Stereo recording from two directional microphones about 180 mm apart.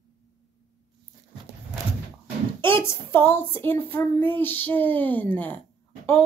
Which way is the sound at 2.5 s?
30° right (ahead or behind).